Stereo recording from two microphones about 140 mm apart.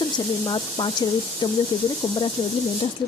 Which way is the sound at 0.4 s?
35° left (ahead or behind).